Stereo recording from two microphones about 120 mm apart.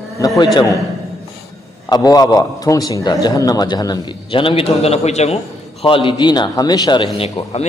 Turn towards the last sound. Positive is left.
turn(degrees=55)  # may be behind; listen again after turning